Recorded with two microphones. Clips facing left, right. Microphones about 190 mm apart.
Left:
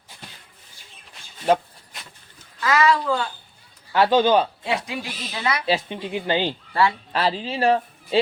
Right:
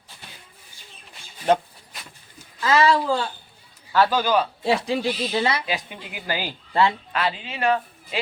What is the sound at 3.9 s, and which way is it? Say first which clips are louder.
Speech: left 3 dB; 25° left (ahead or behind).